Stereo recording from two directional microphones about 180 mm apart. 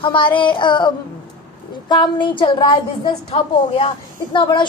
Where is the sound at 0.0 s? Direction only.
25° left (ahead or behind).